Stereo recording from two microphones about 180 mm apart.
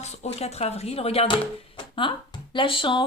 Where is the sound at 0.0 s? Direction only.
35° left (ahead or behind).